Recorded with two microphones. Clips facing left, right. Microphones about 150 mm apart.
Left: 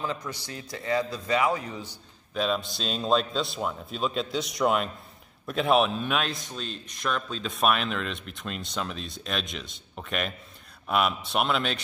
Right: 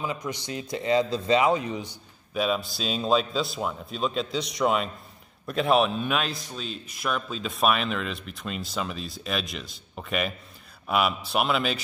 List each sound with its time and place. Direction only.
0.0 s a man's voice: 15° right (ahead or behind)
2.3 s a man's voice: 5° right (ahead or behind)